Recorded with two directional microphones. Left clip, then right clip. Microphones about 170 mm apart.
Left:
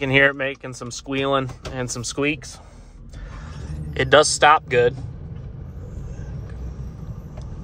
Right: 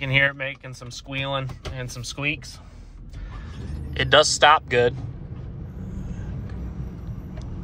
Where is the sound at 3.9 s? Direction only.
35° left (ahead or behind).